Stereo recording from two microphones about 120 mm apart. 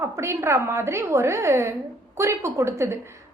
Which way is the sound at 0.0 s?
25° right (ahead or behind).